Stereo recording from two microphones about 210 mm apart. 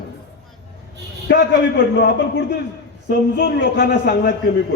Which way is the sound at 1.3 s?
55° left (ahead or behind).